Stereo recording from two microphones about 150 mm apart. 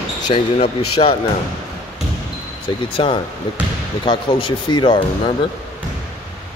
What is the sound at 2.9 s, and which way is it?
Speech, 35° left (ahead or behind).